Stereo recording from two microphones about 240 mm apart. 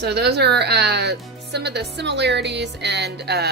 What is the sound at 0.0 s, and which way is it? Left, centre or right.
A woman's voice, right.